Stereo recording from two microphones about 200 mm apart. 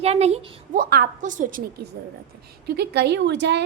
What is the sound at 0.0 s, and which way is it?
A woman's voice, 30° right (ahead or behind).